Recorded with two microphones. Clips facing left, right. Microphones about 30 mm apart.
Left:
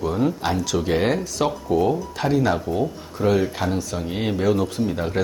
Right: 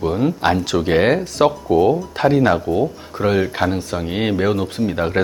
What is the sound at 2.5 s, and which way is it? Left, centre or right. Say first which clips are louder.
Speech: right 5 dB; centre.